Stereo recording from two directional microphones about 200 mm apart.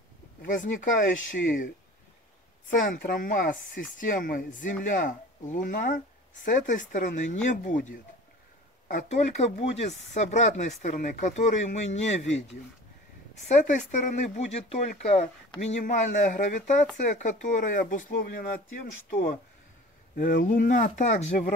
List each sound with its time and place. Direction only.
0.4 s speech: 40° left (ahead or behind)
2.7 s speech: 45° left (ahead or behind)
20.2 s speech: 45° left (ahead or behind)